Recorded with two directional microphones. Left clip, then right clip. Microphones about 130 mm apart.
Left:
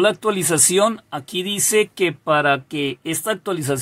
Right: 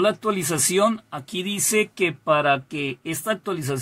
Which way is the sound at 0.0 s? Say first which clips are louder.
Left 4 dB; 40° left (ahead or behind).